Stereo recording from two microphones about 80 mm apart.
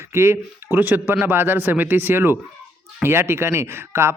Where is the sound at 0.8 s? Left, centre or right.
Right.